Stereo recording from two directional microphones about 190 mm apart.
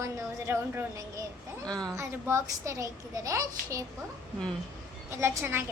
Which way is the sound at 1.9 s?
15° right (ahead or behind).